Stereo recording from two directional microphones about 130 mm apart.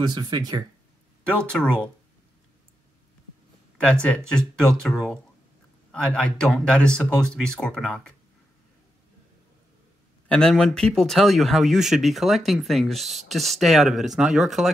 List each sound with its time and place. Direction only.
0.0 s speech: 35° right (ahead or behind)
1.2 s speech: 10° left (ahead or behind)
3.8 s speech: 10° left (ahead or behind)
10.2 s speech: 5° left (ahead or behind)